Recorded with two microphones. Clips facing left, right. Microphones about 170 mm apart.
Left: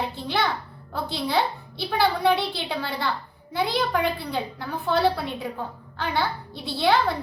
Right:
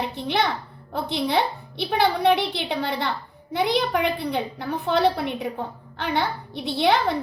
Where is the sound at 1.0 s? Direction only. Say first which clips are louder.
Right 2 dB; 20° right (ahead or behind).